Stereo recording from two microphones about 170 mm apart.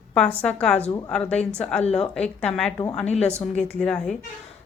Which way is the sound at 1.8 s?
35° left (ahead or behind).